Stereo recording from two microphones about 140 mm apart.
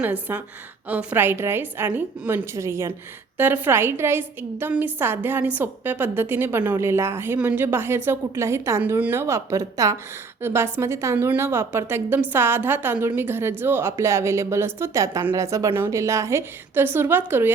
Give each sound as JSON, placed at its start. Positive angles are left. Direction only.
{"t": 0.0, "sound": "a woman's voice", "side_deg": -10}